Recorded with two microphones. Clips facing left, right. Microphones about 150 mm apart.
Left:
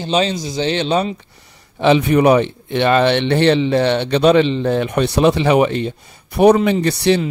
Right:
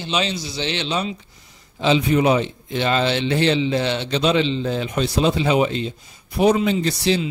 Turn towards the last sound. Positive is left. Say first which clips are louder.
# left 5 dB
turn(degrees=60)  # may be behind; listen again after turning